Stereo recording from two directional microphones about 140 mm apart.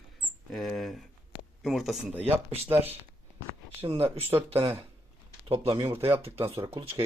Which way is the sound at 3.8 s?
45° right (ahead or behind).